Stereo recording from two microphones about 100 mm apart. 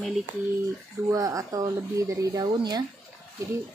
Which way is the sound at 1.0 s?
35° right (ahead or behind).